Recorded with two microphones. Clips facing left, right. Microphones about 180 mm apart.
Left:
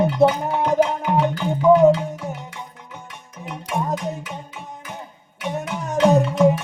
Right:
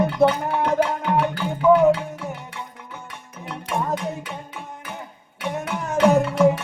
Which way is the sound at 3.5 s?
15° left (ahead or behind).